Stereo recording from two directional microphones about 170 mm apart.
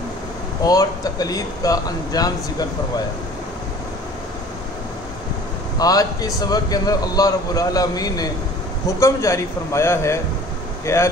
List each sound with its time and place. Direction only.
0.7 s a man's voice: 20° left (ahead or behind)
5.8 s a man's voice: 20° left (ahead or behind)